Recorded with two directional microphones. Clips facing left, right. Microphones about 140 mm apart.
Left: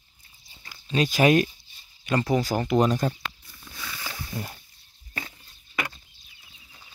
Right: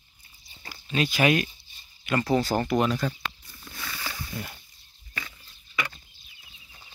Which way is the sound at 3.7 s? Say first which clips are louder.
Even; 10° left (ahead or behind).